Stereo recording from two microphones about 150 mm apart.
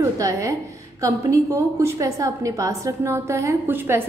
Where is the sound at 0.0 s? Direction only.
20° right (ahead or behind).